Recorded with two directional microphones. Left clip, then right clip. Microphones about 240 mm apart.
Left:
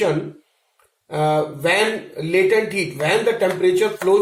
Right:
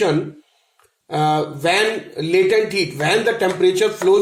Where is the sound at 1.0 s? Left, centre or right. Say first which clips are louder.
Right 1 dB; right.